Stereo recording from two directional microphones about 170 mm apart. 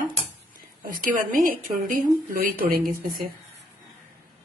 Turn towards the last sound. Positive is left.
turn(degrees=-55)  # may be behind; listen again after turning